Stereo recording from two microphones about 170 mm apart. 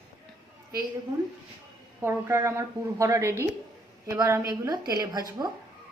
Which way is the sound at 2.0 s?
15° right (ahead or behind).